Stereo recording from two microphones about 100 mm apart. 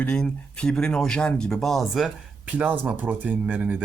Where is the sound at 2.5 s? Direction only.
15° right (ahead or behind).